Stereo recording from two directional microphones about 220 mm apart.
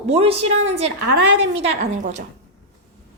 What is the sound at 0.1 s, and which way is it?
A woman's voice, 25° right (ahead or behind).